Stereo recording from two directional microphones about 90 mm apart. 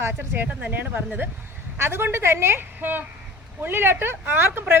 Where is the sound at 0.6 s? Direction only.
20° right (ahead or behind).